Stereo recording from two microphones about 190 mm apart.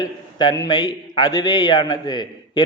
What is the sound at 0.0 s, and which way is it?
A man's voice, 20° left (ahead or behind).